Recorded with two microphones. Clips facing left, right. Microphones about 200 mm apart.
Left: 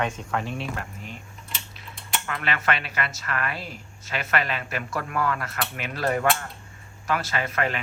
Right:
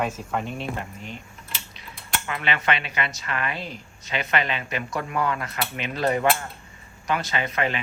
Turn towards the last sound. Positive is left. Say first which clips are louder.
# right 1 dB
turn(degrees=0)  # may be behind; listen again after turning